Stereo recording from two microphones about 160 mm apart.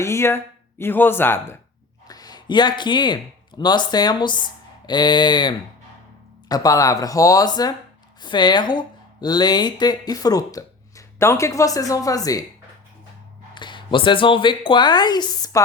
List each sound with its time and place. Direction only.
0.0 s speech: 15° left (ahead or behind)
2.0 s speech: 25° left (ahead or behind)
13.5 s speech: 30° left (ahead or behind)